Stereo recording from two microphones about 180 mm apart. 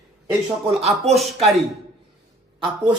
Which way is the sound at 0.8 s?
35° right (ahead or behind).